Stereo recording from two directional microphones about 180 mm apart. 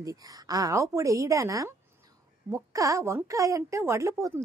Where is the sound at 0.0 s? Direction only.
20° right (ahead or behind).